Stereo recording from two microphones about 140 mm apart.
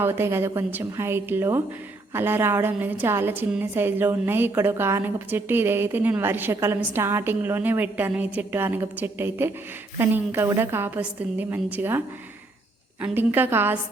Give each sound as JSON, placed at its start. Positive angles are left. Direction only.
{"t": 0.0, "sound": "a woman's voice", "side_deg": -15}